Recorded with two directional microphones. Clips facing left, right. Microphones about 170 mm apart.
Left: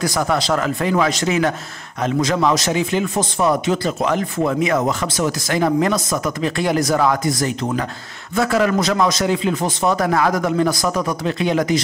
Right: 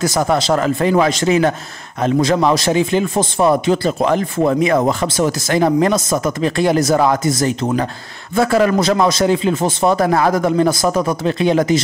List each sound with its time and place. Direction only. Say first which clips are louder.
0.0 s a man's voice: right 3 dB; 25° right (ahead or behind)